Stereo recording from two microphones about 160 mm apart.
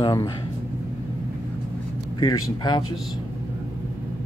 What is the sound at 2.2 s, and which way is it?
Speech, 25° left (ahead or behind).